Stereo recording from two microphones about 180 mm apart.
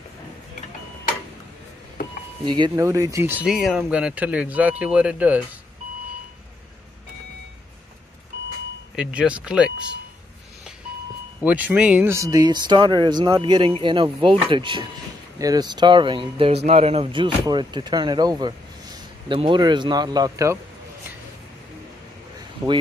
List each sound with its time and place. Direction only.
2.4 s speech: 25° right (ahead or behind); by 5.4 s 5° right (ahead or behind)
8.9 s speech: 5° right (ahead or behind)
11.4 s speech: 10° right (ahead or behind)
22.6 s speech: 20° right (ahead or behind)